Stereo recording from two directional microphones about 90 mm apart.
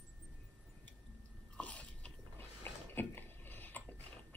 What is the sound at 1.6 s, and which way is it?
Biting, 15° left (ahead or behind).